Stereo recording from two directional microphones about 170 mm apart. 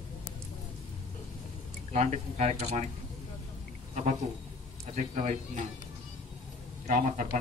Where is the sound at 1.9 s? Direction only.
40° right (ahead or behind).